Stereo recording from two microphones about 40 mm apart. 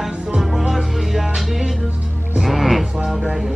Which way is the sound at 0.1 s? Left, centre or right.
Right.